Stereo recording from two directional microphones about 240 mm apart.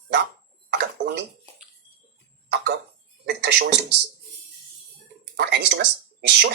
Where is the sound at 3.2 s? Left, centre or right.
Right.